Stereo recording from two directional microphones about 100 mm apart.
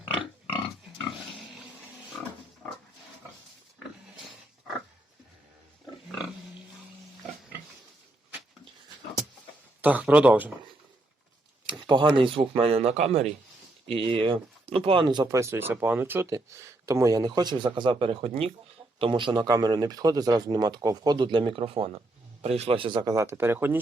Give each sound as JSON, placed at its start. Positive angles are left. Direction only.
{"t": 2.1, "sound": "pig", "side_deg": 5}
{"t": 9.8, "sound": "speech", "side_deg": -15}
{"t": 11.8, "sound": "a sound", "side_deg": -55}
{"t": 12.1, "sound": "speech", "side_deg": -60}
{"t": 13.8, "sound": "speech", "side_deg": -65}
{"t": 15.3, "sound": "speech", "side_deg": -30}
{"t": 17.2, "sound": "speech", "side_deg": -45}
{"t": 18.9, "sound": "speech", "side_deg": -60}
{"t": 23.1, "sound": "speech", "side_deg": -25}